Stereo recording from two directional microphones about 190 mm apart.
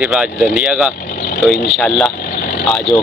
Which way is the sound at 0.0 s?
5° right (ahead or behind).